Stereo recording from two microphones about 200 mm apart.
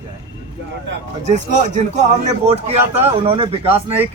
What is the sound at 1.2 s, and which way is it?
A man's voice, 35° right (ahead or behind).